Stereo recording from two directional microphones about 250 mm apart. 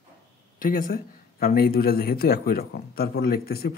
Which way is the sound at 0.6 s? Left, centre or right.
Left.